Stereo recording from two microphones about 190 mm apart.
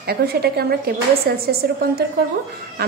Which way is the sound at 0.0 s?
55° right (ahead or behind).